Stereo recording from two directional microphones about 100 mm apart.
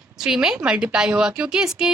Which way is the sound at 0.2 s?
5° right (ahead or behind).